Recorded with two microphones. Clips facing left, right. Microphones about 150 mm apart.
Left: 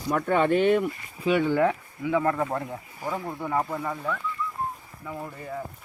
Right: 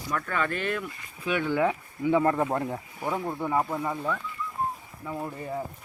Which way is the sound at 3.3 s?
10° right (ahead or behind).